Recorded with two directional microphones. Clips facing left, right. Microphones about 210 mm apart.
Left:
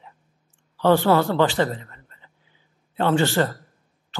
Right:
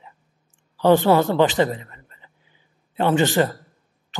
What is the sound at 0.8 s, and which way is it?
A man's voice, 20° right (ahead or behind).